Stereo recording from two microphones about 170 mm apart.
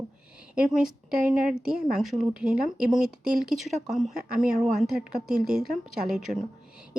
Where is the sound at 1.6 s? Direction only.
Centre (ahead or behind).